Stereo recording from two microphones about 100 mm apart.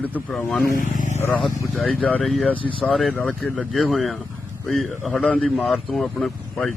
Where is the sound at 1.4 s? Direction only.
Centre (ahead or behind).